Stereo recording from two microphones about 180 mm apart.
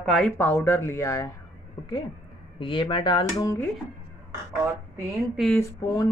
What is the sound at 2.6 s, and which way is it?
Speech, 30° left (ahead or behind).